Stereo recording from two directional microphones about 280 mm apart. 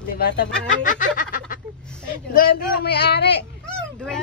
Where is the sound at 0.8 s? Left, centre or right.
Left.